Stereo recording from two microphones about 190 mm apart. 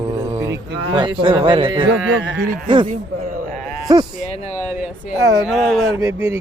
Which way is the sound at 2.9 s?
50° right (ahead or behind).